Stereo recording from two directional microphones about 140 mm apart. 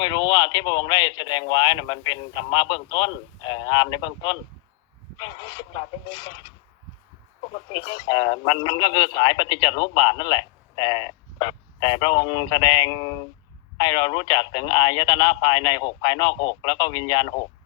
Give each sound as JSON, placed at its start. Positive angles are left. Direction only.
{"t": 0.0, "sound": "a man's voice", "side_deg": 35}
{"t": 7.7, "sound": "a man's voice", "side_deg": 35}